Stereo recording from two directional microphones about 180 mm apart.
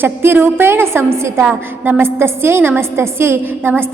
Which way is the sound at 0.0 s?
10° right (ahead or behind).